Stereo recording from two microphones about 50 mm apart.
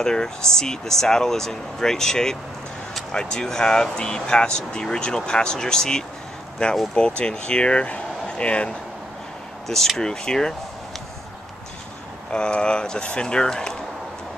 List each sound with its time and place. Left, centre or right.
0.0 s speech: centre
9.7 s speech: centre
12.3 s speech: left